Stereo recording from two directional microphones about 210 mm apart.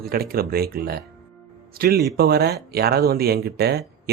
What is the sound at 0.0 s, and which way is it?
Speech, 45° right (ahead or behind).